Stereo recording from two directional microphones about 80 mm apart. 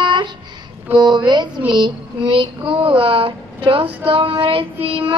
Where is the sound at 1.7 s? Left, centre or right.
Right.